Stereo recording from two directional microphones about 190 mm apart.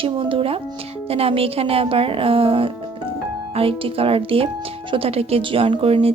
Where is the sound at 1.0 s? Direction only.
30° right (ahead or behind).